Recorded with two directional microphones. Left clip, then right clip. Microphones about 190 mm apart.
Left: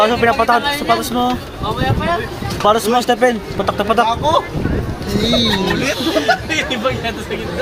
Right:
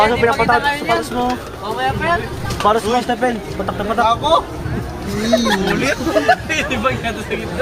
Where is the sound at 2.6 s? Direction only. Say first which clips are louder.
Left 2 dB; 60° left (ahead or behind).